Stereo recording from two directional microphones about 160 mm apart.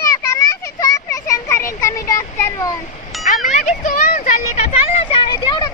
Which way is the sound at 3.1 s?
Centre (ahead or behind).